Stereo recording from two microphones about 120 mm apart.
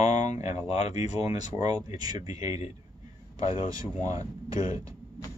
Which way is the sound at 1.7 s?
30° right (ahead or behind).